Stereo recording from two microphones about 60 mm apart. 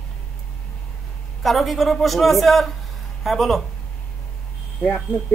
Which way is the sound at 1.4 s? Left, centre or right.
Centre.